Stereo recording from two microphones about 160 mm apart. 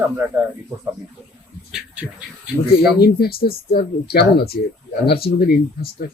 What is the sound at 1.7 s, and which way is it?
Speech, 10° right (ahead or behind).